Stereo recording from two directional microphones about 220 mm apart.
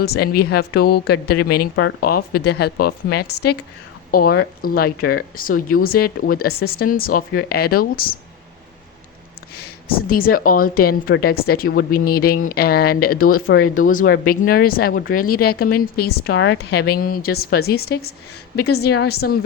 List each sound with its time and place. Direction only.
0.0 s speech: 45° left (ahead or behind)
9.6 s speech: 45° left (ahead or behind)